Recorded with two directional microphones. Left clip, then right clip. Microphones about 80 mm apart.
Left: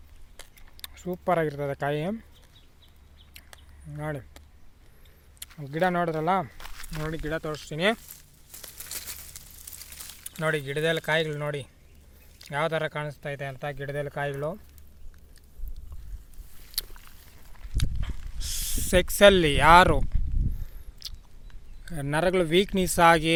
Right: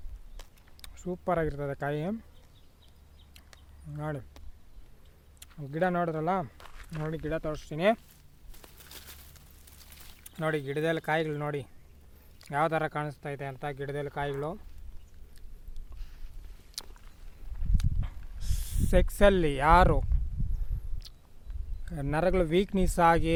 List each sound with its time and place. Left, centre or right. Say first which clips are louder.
0.8 s speech: left 3 dB; centre
3.5 s a sound: even; right
5.4 s speech: left 4 dB; centre
8.8 s crumpling: left 9 dB; left
10.4 s speech: left 3 dB; right
12.4 s speech: left 1 dB; right
13.2 s speech: left 3 dB; right
14.0 s speech: left 4 dB; centre
16.8 s a sound: left 8 dB; centre
17.7 s walk: left 5 dB; right
18.4 s speech: left 8 dB; centre
21.0 s a sound: left 12 dB; centre
21.8 s speech: left 3 dB; centre